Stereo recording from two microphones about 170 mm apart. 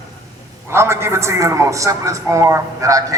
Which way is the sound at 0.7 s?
15° right (ahead or behind).